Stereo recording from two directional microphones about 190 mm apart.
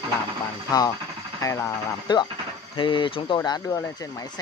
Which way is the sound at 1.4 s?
15° left (ahead or behind).